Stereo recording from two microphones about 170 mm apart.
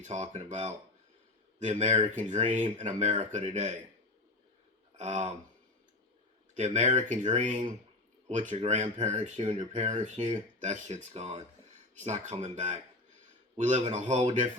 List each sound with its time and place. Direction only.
0.0 s speech: 40° right (ahead or behind)
4.9 s speech: 40° right (ahead or behind)
6.6 s speech: 45° right (ahead or behind)